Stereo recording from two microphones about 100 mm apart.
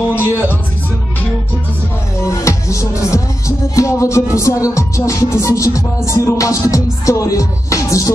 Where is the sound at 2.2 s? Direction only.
30° left (ahead or behind).